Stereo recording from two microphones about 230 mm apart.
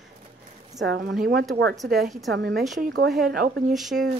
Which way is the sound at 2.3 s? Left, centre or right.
Right.